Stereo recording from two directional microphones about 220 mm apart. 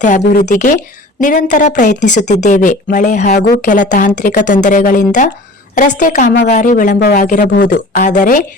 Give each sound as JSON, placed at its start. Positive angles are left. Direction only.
{"t": 0.0, "sound": "speech", "side_deg": 35}